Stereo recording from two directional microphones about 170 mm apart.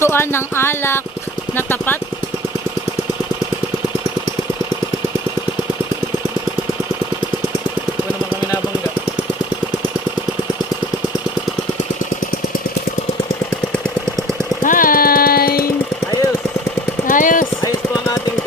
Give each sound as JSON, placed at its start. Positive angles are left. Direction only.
{"t": 0.0, "sound": "speech", "side_deg": 15}
{"t": 14.6, "sound": "music", "side_deg": 55}
{"t": 17.1, "sound": "jackhammer", "side_deg": 50}